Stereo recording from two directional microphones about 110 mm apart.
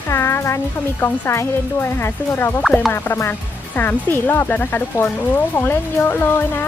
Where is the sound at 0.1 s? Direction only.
25° left (ahead or behind).